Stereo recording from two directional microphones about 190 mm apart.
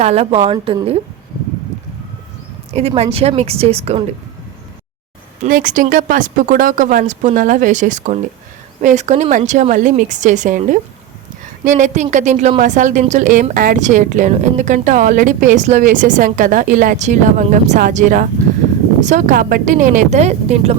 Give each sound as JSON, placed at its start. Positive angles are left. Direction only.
{"t": 0.0, "sound": "speech", "side_deg": -35}
{"t": 2.7, "sound": "speech", "side_deg": -30}
{"t": 5.4, "sound": "speech", "side_deg": -45}